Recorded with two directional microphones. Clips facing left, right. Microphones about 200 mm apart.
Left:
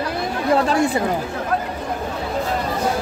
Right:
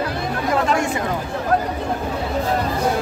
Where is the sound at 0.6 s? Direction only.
35° left (ahead or behind).